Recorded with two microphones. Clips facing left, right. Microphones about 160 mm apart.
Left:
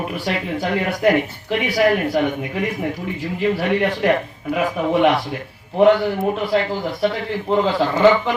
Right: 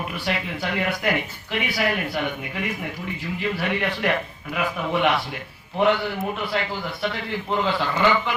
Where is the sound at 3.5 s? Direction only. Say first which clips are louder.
Left 6 dB; 40° left (ahead or behind).